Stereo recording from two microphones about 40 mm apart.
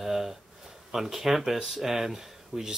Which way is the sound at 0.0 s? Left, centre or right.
Centre.